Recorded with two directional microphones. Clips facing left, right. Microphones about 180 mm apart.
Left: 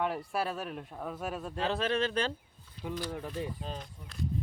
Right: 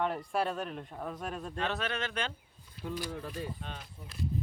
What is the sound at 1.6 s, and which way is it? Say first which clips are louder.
Speech: left 6 dB; 30° left (ahead or behind).